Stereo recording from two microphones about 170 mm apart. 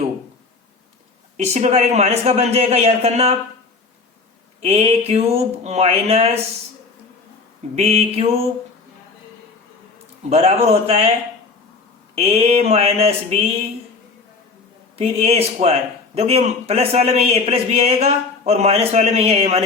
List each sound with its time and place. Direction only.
1.4 s a man's voice: 40° right (ahead or behind)
4.6 s a man's voice: 40° right (ahead or behind)
7.8 s a man's voice: 40° right (ahead or behind)
10.2 s a man's voice: 35° right (ahead or behind)
12.1 s a man's voice: 40° right (ahead or behind)
14.9 s a man's voice: 35° right (ahead or behind)